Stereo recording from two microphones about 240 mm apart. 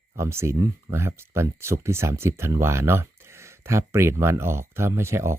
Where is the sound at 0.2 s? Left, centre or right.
Centre.